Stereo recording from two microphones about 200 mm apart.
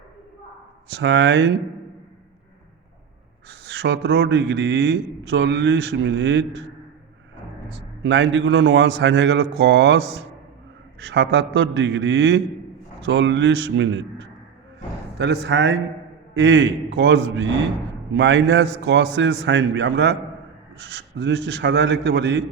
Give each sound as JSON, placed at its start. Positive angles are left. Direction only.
{"t": 0.9, "sound": "a man's voice", "side_deg": -60}
{"t": 3.5, "sound": "a man's voice", "side_deg": -65}
{"t": 7.8, "sound": "a man's voice", "side_deg": -60}
{"t": 11.0, "sound": "a man's voice", "side_deg": -60}